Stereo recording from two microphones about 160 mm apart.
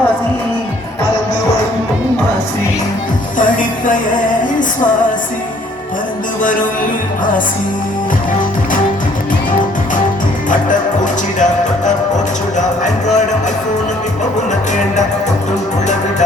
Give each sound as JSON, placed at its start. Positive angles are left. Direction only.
{"t": 3.3, "sound": "music", "side_deg": 55}
{"t": 10.5, "sound": "music", "side_deg": 50}
{"t": 12.5, "sound": "music", "side_deg": 50}